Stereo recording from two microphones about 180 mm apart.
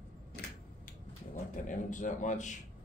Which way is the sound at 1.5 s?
45° left (ahead or behind).